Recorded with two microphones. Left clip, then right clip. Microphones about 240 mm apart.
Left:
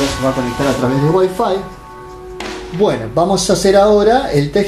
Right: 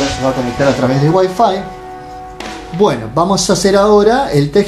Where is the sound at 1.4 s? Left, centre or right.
Right.